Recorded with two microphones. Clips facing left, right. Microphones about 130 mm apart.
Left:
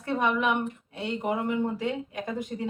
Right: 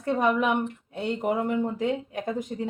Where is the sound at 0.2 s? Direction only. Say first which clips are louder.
Right 1 dB; 40° right (ahead or behind).